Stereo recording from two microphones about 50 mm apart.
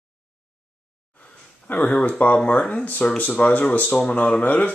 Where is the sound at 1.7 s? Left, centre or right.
Left.